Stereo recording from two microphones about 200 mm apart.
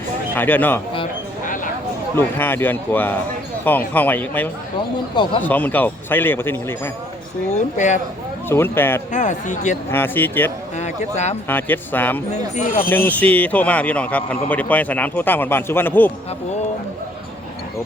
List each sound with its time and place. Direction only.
0.3 s a man's voice: 10° left (ahead or behind)
2.1 s a man's voice: 10° left (ahead or behind)
5.1 s speech: 25° left (ahead or behind)
5.4 s a man's voice: 10° left (ahead or behind)
7.5 s speech: 35° left (ahead or behind)
8.4 s a man's voice: 10° left (ahead or behind)
9.1 s speech: 40° left (ahead or behind)
9.9 s a man's voice: 10° left (ahead or behind)
10.8 s a sound: 35° left (ahead or behind)
11.4 s a man's voice: 10° left (ahead or behind)
12.3 s speech: 35° left (ahead or behind)
12.9 s a man's voice: 10° left (ahead or behind)